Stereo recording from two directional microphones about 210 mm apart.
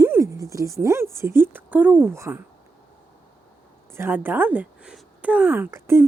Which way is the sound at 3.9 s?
10° right (ahead or behind).